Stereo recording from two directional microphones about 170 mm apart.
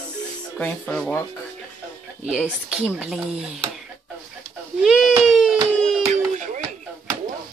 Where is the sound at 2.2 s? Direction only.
5° right (ahead or behind).